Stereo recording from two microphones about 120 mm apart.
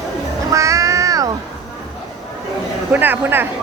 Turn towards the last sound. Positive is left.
turn(degrees=-15)  # may be behind; listen again after turning